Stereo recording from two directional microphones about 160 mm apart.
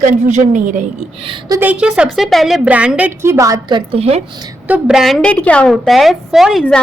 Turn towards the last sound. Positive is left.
turn(degrees=-5)  # may be behind; listen again after turning